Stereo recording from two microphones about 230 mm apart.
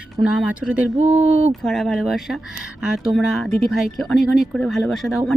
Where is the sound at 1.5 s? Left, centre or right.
Centre.